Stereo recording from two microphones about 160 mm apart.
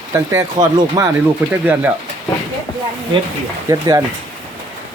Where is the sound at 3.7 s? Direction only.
20° right (ahead or behind).